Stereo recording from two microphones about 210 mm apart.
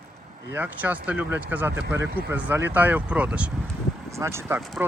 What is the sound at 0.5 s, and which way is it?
Speech, 10° right (ahead or behind).